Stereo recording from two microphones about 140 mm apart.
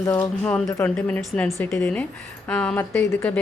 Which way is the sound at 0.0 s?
15° left (ahead or behind).